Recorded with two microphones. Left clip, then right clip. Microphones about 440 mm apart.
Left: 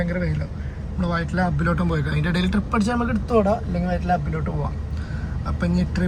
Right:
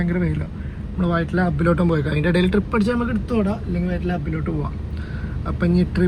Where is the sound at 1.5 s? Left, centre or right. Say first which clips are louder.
Right 4 dB; right.